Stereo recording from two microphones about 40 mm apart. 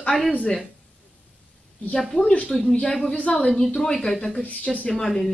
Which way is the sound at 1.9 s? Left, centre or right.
Centre.